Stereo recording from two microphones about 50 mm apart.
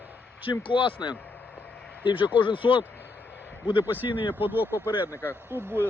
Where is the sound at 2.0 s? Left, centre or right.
Right.